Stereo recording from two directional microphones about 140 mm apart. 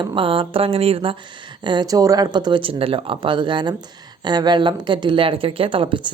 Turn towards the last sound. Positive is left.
turn(degrees=-40)  # may be behind; listen again after turning